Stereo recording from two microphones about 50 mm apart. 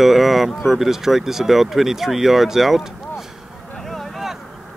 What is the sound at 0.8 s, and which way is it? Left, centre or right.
Speech, centre.